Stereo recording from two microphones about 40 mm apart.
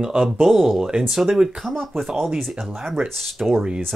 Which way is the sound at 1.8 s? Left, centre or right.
Centre.